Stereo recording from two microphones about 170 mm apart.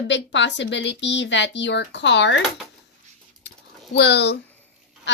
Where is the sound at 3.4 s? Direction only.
90° left.